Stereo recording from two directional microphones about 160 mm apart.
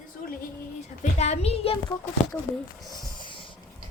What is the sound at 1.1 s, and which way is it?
Speech, 45° left (ahead or behind).